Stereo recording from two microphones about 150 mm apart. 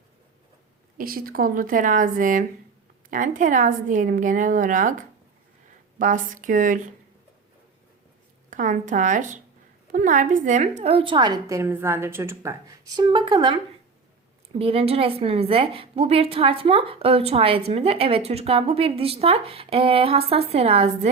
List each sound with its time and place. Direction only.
0.9 s a woman's voice: 75° right (ahead or behind)
8.4 s a woman's voice: 55° right (ahead or behind)